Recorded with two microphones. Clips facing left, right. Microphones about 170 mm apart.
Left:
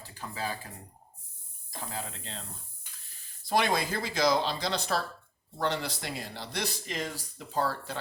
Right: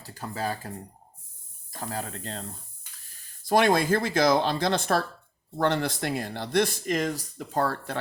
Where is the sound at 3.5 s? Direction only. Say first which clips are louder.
Right 7 dB; 50° right (ahead or behind).